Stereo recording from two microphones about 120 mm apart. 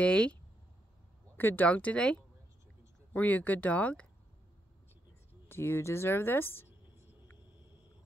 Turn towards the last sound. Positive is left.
turn(degrees=20)  # may be behind; listen again after turning